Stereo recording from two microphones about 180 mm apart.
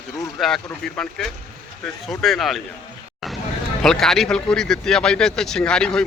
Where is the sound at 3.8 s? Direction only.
5° left (ahead or behind).